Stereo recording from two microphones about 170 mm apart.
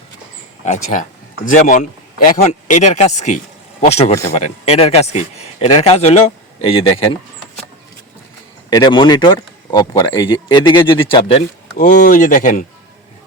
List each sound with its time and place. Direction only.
0.6 s speech: 45° left (ahead or behind)
8.7 s speech: 25° left (ahead or behind)
11.8 s speech: 50° left (ahead or behind)